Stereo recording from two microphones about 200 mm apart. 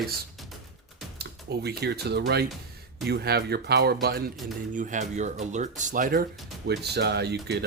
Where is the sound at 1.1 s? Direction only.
55° right (ahead or behind).